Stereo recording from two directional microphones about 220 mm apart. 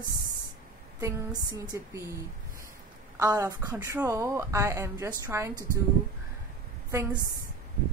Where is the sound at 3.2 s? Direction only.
15° right (ahead or behind).